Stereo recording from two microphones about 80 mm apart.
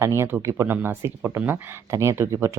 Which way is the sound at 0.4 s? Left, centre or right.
Right.